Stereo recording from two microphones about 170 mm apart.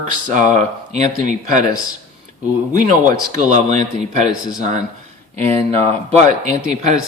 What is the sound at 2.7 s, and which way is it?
A man's voice, 45° right (ahead or behind).